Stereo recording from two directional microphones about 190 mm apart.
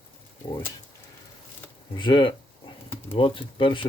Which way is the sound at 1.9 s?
25° left (ahead or behind).